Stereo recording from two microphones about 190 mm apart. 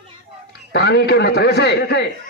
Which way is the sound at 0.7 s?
60° left (ahead or behind).